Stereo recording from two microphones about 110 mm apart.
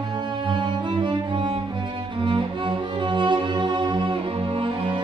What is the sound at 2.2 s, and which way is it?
Music, 50° right (ahead or behind).